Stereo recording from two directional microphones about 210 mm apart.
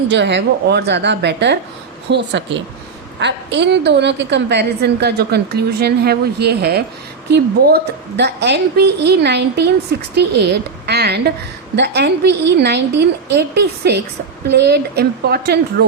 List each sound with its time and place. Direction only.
0.1 s a woman's voice: 55° right (ahead or behind)